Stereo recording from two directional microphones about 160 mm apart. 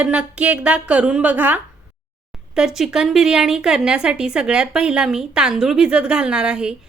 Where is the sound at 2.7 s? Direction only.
5° right (ahead or behind).